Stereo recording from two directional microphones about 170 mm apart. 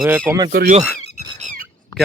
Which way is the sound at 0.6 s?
65° right (ahead or behind).